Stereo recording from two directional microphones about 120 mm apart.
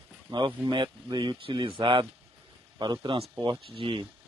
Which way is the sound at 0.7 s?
40° right (ahead or behind).